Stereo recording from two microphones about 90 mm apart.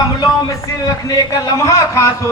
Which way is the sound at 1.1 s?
45° left (ahead or behind).